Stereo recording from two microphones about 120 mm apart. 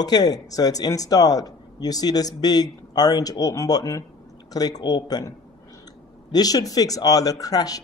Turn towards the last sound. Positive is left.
turn(degrees=30)  # may be behind; listen again after turning